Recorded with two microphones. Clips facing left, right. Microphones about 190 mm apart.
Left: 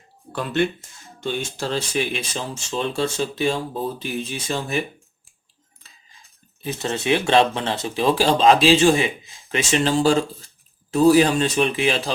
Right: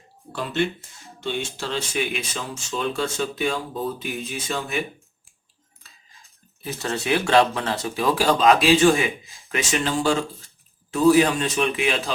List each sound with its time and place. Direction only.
1.2 s speech: 40° left (ahead or behind)
6.6 s speech: 20° left (ahead or behind)